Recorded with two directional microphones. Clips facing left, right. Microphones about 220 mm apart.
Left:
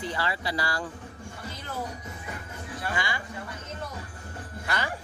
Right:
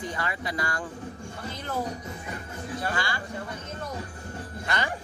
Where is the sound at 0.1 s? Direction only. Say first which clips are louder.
Left 1 dB; 30° left (ahead or behind).